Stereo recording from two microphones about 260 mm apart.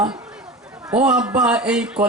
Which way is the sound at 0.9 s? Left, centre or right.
Centre.